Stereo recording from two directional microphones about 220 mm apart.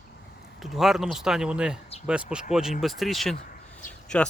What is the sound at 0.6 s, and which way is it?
Speech, centre (ahead or behind).